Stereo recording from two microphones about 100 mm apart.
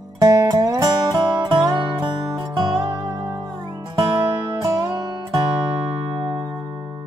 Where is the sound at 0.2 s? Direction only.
35° right (ahead or behind).